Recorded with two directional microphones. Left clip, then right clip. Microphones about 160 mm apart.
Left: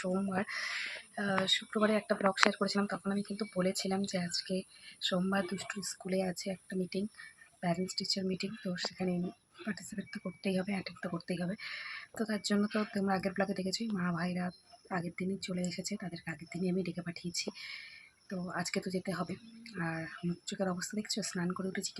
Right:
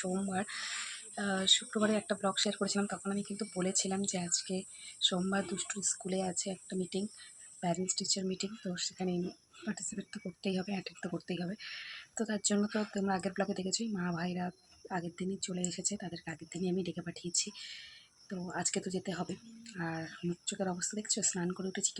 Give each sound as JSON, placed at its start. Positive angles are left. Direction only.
{"t": 0.0, "sound": "speech", "side_deg": 0}
{"t": 7.9, "sound": "speech", "side_deg": -25}
{"t": 8.1, "sound": "speech", "side_deg": 0}
{"t": 18.3, "sound": "speech", "side_deg": 0}